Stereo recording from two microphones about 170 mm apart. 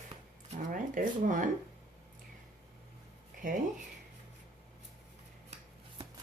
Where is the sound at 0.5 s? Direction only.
50° right (ahead or behind).